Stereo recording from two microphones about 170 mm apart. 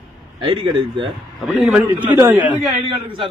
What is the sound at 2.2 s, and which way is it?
Speech, 10° right (ahead or behind).